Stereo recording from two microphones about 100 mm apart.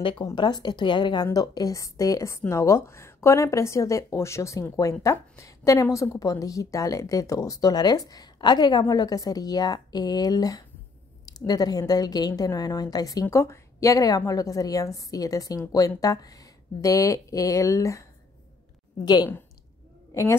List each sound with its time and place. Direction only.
0.0 s a woman's voice: 50° left (ahead or behind); by 18.0 s 30° left (ahead or behind)
19.0 s a woman's voice: 45° left (ahead or behind)